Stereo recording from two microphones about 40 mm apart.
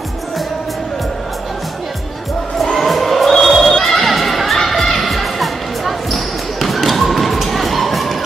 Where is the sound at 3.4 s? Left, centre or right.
Centre.